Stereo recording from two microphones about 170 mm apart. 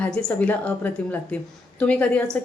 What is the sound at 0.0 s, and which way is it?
A woman's voice, 5° left (ahead or behind).